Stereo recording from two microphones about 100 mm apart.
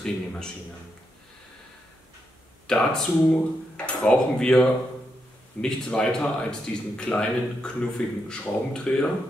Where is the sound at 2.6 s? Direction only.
5° left (ahead or behind).